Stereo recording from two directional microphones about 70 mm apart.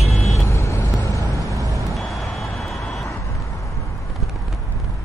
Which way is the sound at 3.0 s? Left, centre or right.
Left.